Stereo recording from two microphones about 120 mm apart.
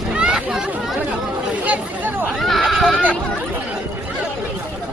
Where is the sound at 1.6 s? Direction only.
15° right (ahead or behind).